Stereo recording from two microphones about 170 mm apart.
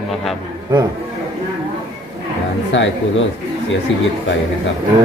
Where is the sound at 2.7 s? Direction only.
90° left.